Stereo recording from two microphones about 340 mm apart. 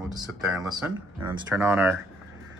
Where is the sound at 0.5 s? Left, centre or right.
Centre.